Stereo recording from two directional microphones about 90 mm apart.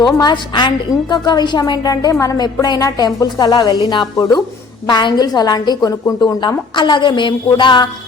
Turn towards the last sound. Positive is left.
turn(degrees=60)  # may be behind; listen again after turning